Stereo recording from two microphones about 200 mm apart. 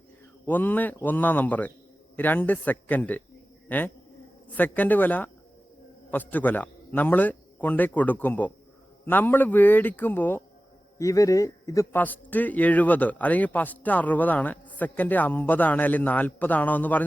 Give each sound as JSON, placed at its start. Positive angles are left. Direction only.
{"t": 0.4, "sound": "a man's voice", "side_deg": 10}